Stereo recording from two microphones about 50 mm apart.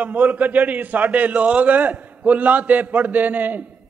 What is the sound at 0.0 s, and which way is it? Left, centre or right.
A man's voice, right.